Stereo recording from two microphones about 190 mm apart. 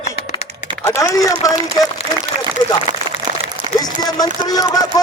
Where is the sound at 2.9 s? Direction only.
20° right (ahead or behind).